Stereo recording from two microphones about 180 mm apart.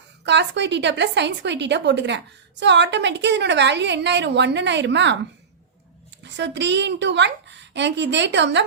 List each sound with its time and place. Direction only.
0.3 s a woman's voice: 75° right (ahead or behind)
6.2 s a woman's voice: 75° right (ahead or behind)